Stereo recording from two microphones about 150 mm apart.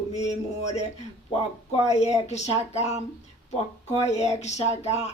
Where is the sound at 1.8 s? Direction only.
45° left (ahead or behind).